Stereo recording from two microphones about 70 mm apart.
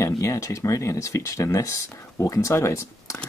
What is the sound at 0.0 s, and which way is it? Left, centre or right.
Speech, left.